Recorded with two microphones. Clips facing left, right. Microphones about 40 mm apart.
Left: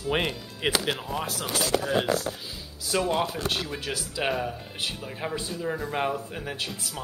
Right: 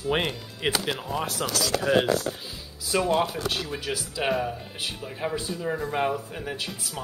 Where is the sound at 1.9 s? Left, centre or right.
Right.